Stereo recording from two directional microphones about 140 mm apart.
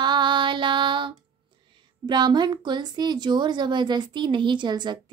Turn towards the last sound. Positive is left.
turn(degrees=-30)  # may be behind; listen again after turning